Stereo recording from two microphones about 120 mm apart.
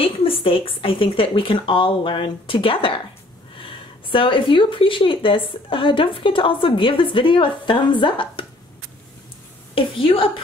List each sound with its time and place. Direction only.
0.0 s a woman's voice: 50° left (ahead or behind)
9.8 s a woman's voice: 45° left (ahead or behind)